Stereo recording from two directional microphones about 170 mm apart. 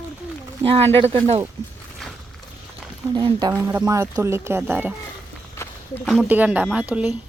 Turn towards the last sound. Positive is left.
turn(degrees=-10)  # may be behind; listen again after turning